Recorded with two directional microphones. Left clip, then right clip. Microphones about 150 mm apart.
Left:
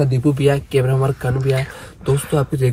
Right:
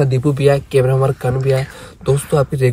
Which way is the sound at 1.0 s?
40° right (ahead or behind).